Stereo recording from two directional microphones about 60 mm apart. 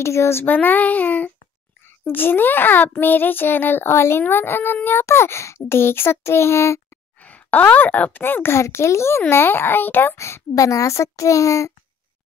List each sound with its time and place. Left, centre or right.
0.0 s speech: left
0.5 s child singing: left
1.9 s a child's voice: left
7.2 s speech: left
9.3 s a child's voice: left
10.1 s speech: left
10.5 s a child's voice: left